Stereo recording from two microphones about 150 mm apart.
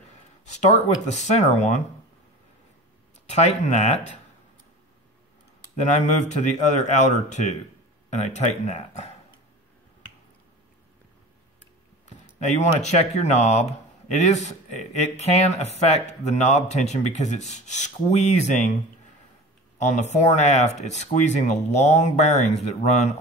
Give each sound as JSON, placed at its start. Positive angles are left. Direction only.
{"t": 0.1, "sound": "a sound", "side_deg": 50}
{"t": 1.0, "sound": "speech", "side_deg": 50}
{"t": 3.3, "sound": "speech", "side_deg": 50}
{"t": 5.8, "sound": "speech", "side_deg": 50}
{"t": 12.4, "sound": "speech", "side_deg": 50}
{"t": 20.0, "sound": "speech", "side_deg": 50}